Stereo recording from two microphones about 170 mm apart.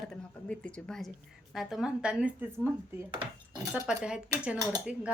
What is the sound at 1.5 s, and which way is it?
Speech, centre (ahead or behind).